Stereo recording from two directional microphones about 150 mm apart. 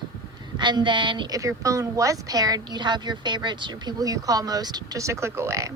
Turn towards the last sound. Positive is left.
turn(degrees=-20)  # may be behind; listen again after turning